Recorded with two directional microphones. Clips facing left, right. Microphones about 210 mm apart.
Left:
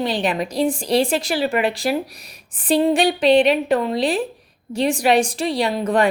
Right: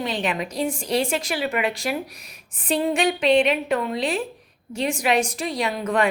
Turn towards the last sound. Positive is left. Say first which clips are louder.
# left 4 dB
turn(degrees=35)  # may be behind; listen again after turning